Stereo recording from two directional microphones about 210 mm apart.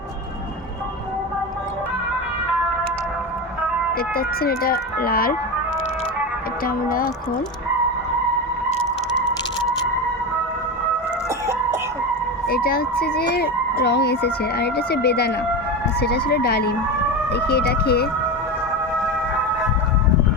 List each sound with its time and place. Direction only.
3.9 s speech: 45° left (ahead or behind)
8.7 s a sound: 70° left (ahead or behind)
12.5 s speech: 50° left (ahead or behind)